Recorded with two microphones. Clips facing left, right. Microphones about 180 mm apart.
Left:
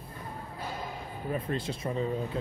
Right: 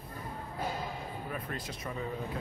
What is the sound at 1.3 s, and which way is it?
Speech, 30° left (ahead or behind).